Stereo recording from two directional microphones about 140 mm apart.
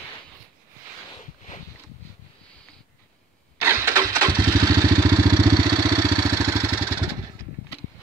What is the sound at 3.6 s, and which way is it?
Engine starting, 20° right (ahead or behind).